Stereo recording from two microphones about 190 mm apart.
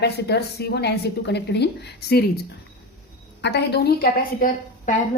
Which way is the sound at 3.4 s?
60° left (ahead or behind).